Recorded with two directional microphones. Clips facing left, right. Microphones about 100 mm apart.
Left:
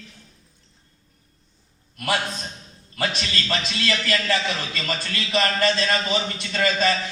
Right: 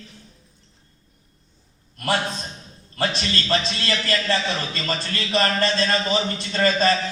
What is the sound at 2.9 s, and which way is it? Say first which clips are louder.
A man's voice: right 2 dB; 35° right (ahead or behind).